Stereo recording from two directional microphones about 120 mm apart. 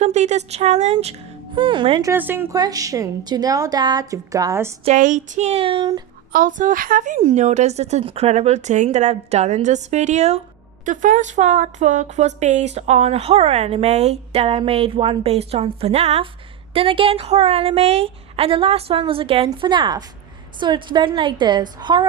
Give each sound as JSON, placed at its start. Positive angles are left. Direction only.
{"t": 0.0, "sound": "a woman's voice", "side_deg": -70}
{"t": 1.5, "sound": "a woman's voice", "side_deg": -45}
{"t": 2.1, "sound": "a woman's voice", "side_deg": -15}
{"t": 2.6, "sound": "a woman's voice", "side_deg": -30}
{"t": 4.9, "sound": "speech", "side_deg": -90}
{"t": 6.5, "sound": "a woman's voice", "side_deg": -90}
{"t": 7.2, "sound": "a woman's voice", "side_deg": -65}
{"t": 10.8, "sound": "speech", "side_deg": -90}
{"t": 16.7, "sound": "a woman's voice", "side_deg": -50}
{"t": 19.5, "sound": "a woman's voice", "side_deg": -40}